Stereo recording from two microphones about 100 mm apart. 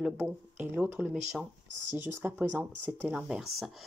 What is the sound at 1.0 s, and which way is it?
Speech, 10° right (ahead or behind).